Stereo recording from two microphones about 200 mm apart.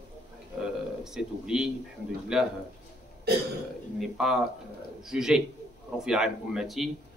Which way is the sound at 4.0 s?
Centre (ahead or behind).